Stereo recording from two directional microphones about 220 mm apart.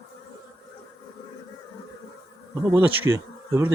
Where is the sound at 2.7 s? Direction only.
10° right (ahead or behind).